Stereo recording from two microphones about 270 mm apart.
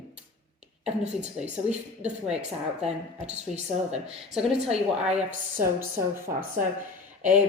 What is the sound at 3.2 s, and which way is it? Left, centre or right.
Speech, right.